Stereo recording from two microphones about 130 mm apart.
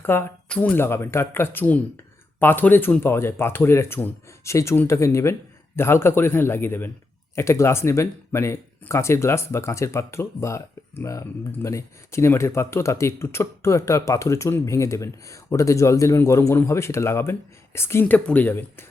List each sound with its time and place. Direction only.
0.0 s speech: 15° left (ahead or behind)